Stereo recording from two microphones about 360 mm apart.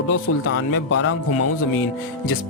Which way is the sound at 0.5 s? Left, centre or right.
Left.